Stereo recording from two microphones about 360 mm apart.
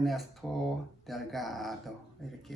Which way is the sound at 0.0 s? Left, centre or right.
Centre.